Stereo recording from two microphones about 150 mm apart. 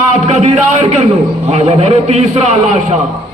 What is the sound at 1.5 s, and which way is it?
Speech, 45° right (ahead or behind).